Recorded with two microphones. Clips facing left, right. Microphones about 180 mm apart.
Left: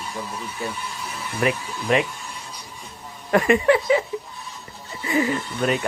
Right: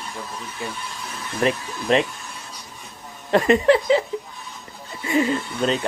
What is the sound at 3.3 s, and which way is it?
Speech, 30° right (ahead or behind).